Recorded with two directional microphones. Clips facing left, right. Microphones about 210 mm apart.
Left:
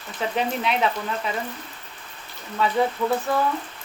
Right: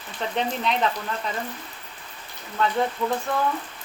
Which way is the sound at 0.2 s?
5° left (ahead or behind).